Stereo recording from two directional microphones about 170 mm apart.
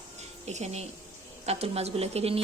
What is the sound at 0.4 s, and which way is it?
A woman's voice, 40° right (ahead or behind).